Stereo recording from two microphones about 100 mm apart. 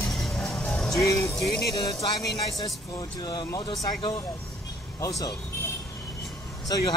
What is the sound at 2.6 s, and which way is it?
Speech, 40° left (ahead or behind).